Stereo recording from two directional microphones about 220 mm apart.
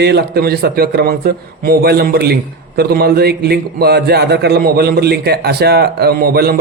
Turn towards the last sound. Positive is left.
turn(degrees=-45)  # may be behind; listen again after turning